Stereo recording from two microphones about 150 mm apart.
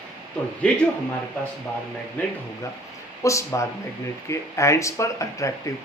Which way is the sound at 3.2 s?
20° left (ahead or behind).